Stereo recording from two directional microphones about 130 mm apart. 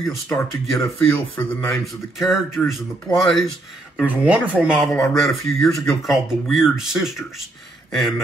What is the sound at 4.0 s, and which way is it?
Speech, 10° right (ahead or behind).